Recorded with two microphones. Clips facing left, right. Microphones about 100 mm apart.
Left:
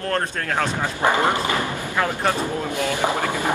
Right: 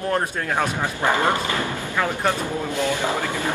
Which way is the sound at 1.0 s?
20° left (ahead or behind).